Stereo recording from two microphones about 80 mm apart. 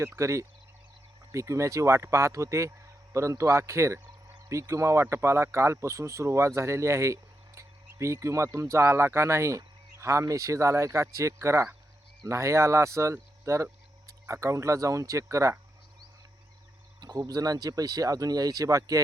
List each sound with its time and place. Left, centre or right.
0.2 s speech: right
17.0 s speech: right